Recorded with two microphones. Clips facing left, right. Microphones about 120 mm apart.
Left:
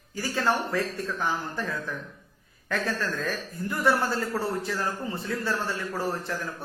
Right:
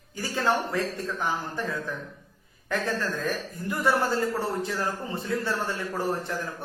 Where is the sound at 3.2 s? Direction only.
15° right (ahead or behind).